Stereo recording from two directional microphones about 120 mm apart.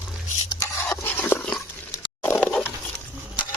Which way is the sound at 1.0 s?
20° left (ahead or behind).